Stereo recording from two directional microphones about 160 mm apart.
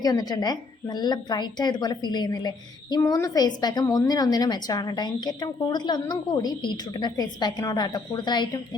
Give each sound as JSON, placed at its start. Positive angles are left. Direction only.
{"t": 0.0, "sound": "a woman's voice", "side_deg": 25}